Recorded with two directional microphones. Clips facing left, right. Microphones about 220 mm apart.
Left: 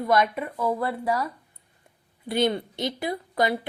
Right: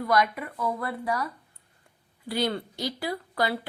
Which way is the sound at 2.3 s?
20° left (ahead or behind).